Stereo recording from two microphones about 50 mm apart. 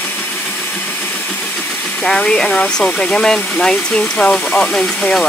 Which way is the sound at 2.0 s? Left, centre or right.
Centre.